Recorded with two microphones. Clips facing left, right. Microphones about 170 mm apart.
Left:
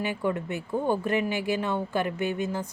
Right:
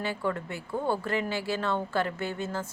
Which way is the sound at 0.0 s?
15° left (ahead or behind).